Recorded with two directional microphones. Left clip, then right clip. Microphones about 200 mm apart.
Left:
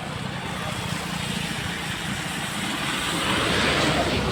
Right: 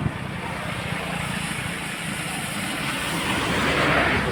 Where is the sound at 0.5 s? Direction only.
45° right (ahead or behind).